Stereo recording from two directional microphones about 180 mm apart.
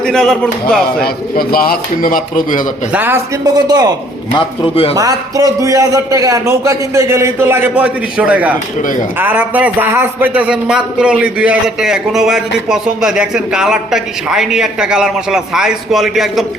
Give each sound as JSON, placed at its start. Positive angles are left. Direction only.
{"t": 0.0, "sound": "a man's voice", "side_deg": 0}
{"t": 1.0, "sound": "speech", "side_deg": 55}
{"t": 2.9, "sound": "a man's voice", "side_deg": -10}
{"t": 3.4, "sound": "speech", "side_deg": -20}
{"t": 4.4, "sound": "speech", "side_deg": 30}
{"t": 4.9, "sound": "a man's voice", "side_deg": -20}
{"t": 8.8, "sound": "speech", "side_deg": 45}
{"t": 9.1, "sound": "a man's voice", "side_deg": -10}